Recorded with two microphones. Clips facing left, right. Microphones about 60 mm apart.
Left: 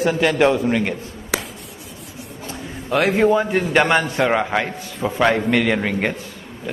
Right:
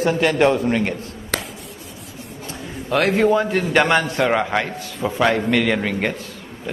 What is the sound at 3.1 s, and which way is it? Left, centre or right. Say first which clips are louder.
A man's voice: left 1 dB; centre.